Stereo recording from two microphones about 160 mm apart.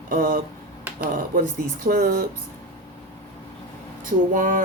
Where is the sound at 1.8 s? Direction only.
65° right (ahead or behind).